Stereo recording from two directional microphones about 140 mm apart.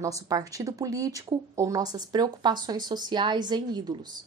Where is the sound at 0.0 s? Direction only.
25° right (ahead or behind).